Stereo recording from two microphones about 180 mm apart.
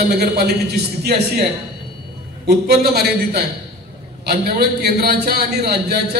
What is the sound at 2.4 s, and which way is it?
A man's voice, 65° right (ahead or behind).